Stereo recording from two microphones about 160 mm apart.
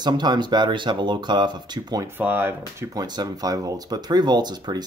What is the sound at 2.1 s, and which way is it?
Speech, 15° right (ahead or behind).